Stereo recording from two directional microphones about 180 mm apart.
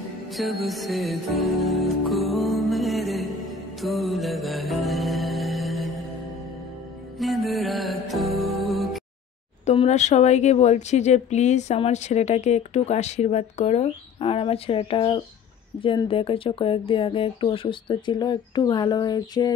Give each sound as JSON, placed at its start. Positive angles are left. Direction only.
{"t": 0.3, "sound": "music", "side_deg": 0}
{"t": 7.2, "sound": "music", "side_deg": 0}
{"t": 9.7, "sound": "speech", "side_deg": 40}